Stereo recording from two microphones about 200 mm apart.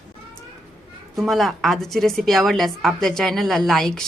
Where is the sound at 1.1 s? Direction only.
Centre (ahead or behind).